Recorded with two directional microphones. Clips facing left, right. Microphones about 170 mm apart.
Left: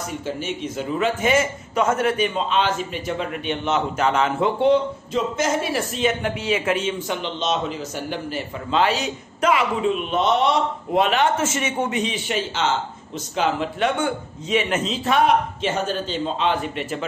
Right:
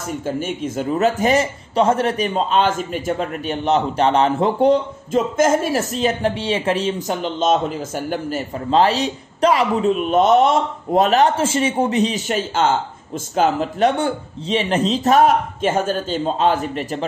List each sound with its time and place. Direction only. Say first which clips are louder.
0.2 s a man's voice: right 6 dB; 50° right (ahead or behind)
10.1 s a man's voice: right 6 dB; 45° right (ahead or behind)